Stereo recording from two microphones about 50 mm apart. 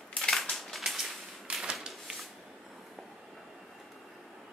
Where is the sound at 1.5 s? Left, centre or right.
Right.